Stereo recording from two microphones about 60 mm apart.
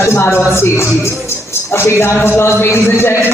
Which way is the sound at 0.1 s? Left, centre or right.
Left.